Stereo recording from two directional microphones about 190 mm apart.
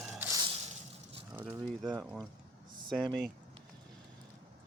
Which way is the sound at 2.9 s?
5° left (ahead or behind).